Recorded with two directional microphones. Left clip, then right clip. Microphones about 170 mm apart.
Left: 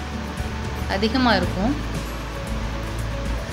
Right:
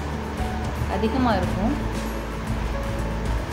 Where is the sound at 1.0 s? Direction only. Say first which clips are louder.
Left 3 dB; 15° left (ahead or behind).